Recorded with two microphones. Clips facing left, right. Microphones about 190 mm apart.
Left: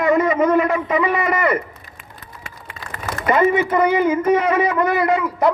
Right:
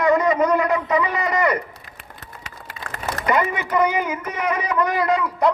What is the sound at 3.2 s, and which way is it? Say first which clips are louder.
Speech: left 6 dB; 25° left (ahead or behind).